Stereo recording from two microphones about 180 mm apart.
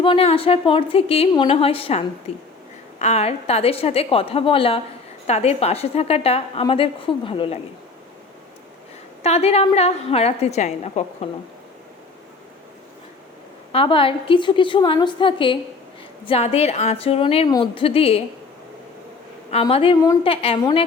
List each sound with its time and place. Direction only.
0.0 s a woman's voice: 30° left (ahead or behind)
9.2 s a woman's voice: 35° left (ahead or behind)
13.7 s a woman's voice: 30° left (ahead or behind)
19.5 s a woman's voice: 35° left (ahead or behind)